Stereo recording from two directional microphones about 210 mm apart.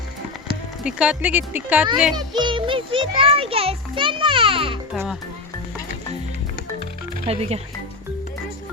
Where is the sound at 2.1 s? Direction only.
20° right (ahead or behind).